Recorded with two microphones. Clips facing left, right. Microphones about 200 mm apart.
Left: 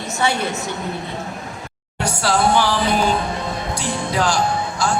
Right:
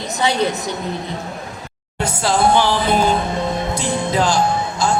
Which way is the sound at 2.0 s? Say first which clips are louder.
Right 1 dB; 20° right (ahead or behind).